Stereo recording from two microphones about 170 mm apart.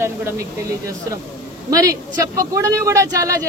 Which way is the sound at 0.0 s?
15° right (ahead or behind).